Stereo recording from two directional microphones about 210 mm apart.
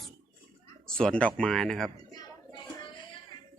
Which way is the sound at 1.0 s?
5° left (ahead or behind).